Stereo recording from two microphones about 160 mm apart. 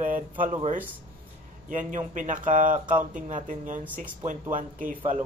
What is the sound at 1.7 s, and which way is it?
Speech, 55° right (ahead or behind).